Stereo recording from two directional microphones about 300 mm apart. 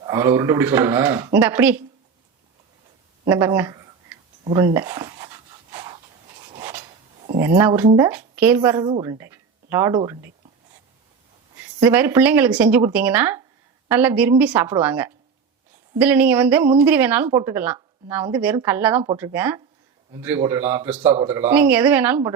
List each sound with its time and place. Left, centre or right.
0.0 s speech: centre
3.2 s a sound: centre
7.3 s speech: centre
11.5 s speech: centre
21.1 s speech: right
21.3 s speech: centre